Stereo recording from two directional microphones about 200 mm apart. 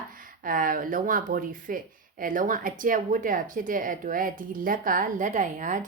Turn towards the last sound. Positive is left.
turn(degrees=-40)  # may be behind; listen again after turning